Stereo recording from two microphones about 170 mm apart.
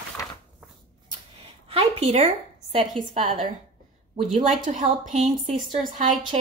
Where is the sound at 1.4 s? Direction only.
35° right (ahead or behind).